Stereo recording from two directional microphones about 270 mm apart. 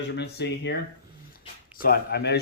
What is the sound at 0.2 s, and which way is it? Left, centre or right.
Speech, left.